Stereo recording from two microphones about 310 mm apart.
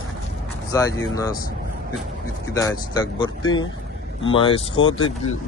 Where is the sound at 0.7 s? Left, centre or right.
Centre.